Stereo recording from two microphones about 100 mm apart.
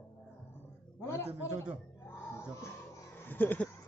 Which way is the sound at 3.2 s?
20° left (ahead or behind).